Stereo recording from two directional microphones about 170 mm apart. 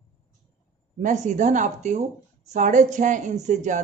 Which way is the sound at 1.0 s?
45° right (ahead or behind).